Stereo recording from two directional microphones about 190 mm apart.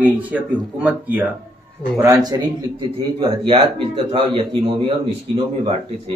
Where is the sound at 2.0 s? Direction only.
20° right (ahead or behind).